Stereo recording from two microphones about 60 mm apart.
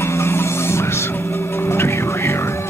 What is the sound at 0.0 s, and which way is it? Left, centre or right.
Music, left.